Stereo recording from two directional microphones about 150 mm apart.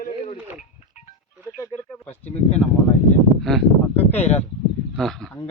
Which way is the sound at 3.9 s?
10° left (ahead or behind).